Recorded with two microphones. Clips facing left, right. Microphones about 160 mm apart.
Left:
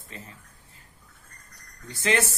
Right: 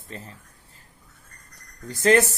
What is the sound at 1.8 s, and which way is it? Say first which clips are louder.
Speech: right 7 dB; 40° right (ahead or behind).